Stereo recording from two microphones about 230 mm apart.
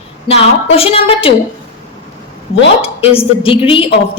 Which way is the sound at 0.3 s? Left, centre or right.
Left.